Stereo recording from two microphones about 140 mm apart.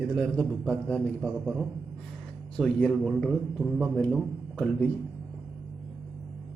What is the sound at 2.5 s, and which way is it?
A man's voice, 5° left (ahead or behind).